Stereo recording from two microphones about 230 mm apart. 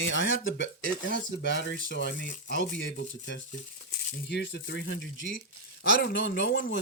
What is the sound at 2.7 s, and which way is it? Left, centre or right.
Speech, left.